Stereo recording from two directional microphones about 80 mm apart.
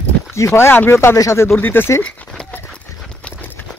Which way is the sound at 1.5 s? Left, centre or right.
Left.